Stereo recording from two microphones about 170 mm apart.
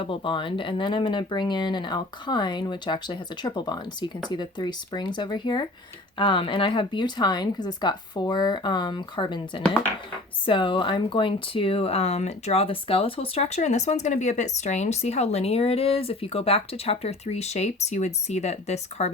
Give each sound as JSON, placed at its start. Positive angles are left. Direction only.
{"t": 0.0, "sound": "speech", "side_deg": 30}